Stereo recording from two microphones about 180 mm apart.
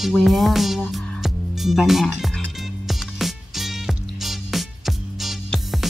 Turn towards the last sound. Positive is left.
turn(degrees=0)  # may be behind; listen again after turning